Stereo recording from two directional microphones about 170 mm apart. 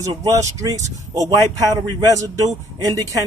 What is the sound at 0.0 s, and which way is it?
Speech, 20° right (ahead or behind).